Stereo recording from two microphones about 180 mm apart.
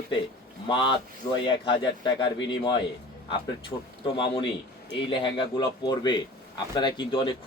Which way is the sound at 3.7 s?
10° left (ahead or behind).